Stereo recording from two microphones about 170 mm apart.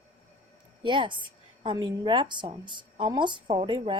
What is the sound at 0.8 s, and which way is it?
A woman's voice, 30° right (ahead or behind).